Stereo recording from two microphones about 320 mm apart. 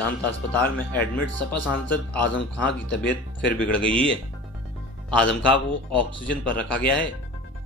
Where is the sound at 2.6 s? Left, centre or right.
Left.